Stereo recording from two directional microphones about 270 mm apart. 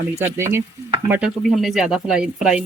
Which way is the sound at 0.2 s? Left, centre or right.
Centre.